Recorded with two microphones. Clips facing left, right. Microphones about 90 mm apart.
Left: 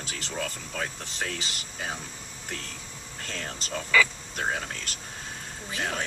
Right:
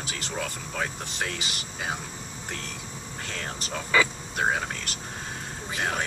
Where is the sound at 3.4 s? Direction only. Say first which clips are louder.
Even; 25° right (ahead or behind).